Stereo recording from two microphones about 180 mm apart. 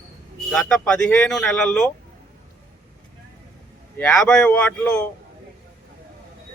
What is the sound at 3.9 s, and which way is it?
Speech, 5° left (ahead or behind).